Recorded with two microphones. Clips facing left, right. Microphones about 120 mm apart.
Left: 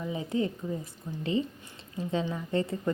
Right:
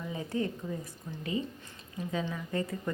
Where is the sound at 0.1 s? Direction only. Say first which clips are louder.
Left 3 dB; 20° left (ahead or behind).